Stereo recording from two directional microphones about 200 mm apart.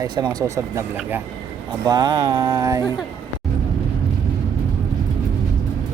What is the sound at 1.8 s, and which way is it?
Speech, 20° right (ahead or behind).